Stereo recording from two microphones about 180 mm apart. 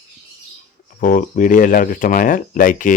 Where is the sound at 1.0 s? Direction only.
45° left (ahead or behind).